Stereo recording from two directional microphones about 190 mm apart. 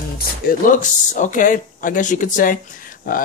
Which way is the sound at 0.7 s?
45° left (ahead or behind).